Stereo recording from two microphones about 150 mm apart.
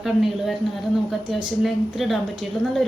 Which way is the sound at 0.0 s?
Centre (ahead or behind).